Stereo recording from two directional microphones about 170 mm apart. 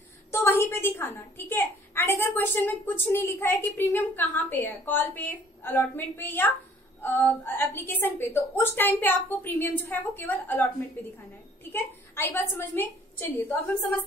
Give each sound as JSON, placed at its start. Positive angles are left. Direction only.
{"t": 0.3, "sound": "a woman's voice", "side_deg": 15}
{"t": 11.7, "sound": "a woman's voice", "side_deg": 15}